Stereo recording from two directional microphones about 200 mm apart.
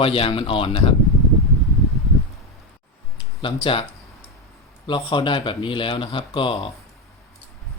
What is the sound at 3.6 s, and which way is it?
Speech, 25° left (ahead or behind).